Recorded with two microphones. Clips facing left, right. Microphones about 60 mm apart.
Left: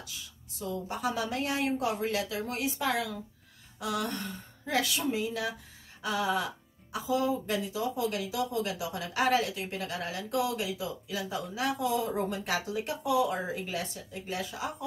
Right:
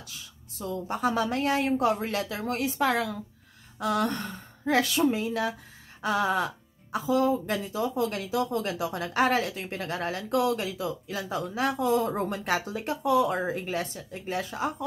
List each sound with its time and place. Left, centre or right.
0.6 s speech: right